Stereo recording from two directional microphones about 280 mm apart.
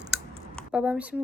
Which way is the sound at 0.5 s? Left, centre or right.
Centre.